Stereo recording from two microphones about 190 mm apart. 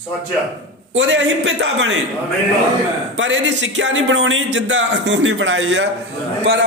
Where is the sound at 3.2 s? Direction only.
75° right (ahead or behind).